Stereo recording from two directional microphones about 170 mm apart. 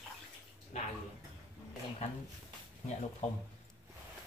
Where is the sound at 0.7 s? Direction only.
45° left (ahead or behind).